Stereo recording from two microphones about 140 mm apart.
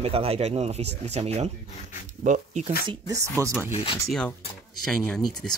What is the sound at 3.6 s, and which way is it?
Speech, 45° left (ahead or behind).